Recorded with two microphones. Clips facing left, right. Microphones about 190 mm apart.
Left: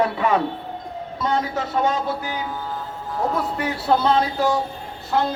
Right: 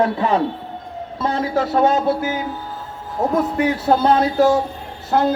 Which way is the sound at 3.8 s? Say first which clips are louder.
Right 1 dB; 50° right (ahead or behind).